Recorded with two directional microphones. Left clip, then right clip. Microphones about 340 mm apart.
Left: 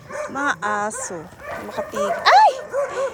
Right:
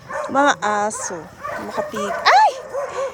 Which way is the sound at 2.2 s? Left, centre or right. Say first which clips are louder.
Even; centre.